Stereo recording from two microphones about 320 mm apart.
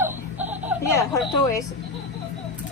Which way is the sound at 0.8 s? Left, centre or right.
Centre.